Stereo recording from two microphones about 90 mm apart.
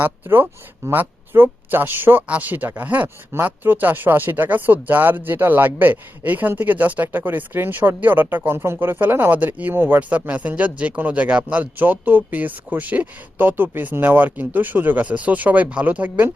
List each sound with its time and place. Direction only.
0.0 s speech: 25° right (ahead or behind)